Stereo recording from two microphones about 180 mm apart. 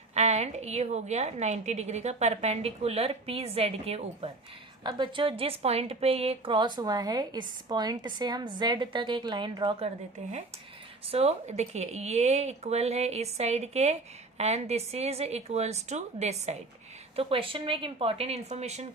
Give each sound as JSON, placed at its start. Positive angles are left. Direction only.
{"t": 0.1, "sound": "a woman's voice", "side_deg": -40}
{"t": 11.1, "sound": "speech", "side_deg": -35}